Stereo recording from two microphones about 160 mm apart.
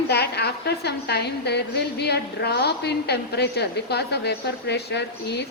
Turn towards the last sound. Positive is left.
turn(degrees=90)